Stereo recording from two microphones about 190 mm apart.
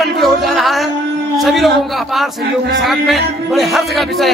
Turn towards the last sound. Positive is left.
turn(degrees=0)  # may be behind; listen again after turning